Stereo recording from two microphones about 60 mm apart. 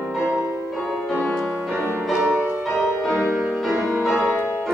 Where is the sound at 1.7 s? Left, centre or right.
Left.